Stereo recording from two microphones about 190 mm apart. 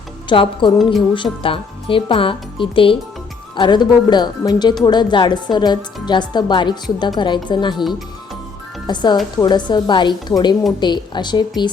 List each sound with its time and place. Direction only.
0.3 s speech: 25° left (ahead or behind)
8.9 s speech: 25° left (ahead or behind)